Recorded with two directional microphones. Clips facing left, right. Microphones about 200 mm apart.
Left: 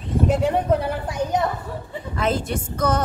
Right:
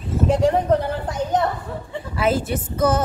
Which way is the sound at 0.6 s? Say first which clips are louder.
Right 2 dB; 10° left (ahead or behind).